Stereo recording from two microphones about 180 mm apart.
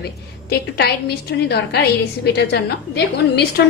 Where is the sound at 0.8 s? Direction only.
65° left (ahead or behind).